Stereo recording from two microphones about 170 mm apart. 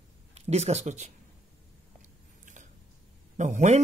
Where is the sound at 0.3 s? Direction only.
40° right (ahead or behind).